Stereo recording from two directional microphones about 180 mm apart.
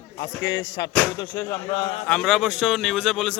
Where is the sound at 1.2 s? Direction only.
20° left (ahead or behind).